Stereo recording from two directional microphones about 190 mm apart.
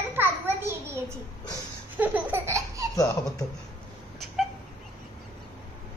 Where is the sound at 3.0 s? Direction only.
20° left (ahead or behind).